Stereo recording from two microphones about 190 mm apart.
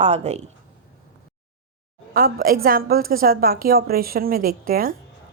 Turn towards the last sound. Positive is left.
turn(degrees=-50)  # may be behind; listen again after turning